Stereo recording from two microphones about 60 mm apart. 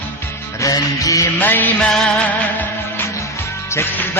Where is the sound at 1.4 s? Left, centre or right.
Left.